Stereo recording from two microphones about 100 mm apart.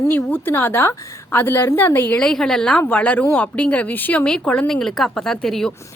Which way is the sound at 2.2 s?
5° left (ahead or behind).